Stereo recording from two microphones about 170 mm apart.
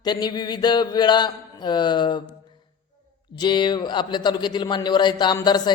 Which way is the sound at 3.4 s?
25° left (ahead or behind).